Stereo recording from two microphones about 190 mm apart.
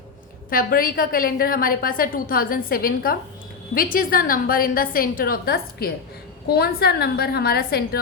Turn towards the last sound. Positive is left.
turn(degrees=55)  # may be behind; listen again after turning